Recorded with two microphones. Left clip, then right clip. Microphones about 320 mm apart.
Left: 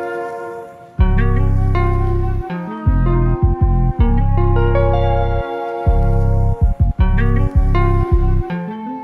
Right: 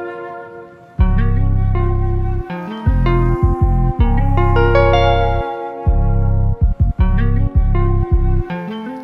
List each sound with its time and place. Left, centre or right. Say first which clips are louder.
3.0 s music: right 3 dB; right
4.6 s music: right 5 dB; right
4.9 s music: right 5 dB; right